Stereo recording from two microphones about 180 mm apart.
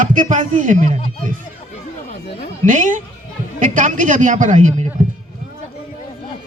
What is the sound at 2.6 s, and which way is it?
A man's voice, 45° right (ahead or behind).